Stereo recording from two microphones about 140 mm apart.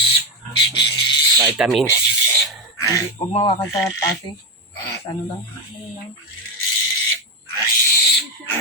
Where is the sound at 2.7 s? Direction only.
20° left (ahead or behind).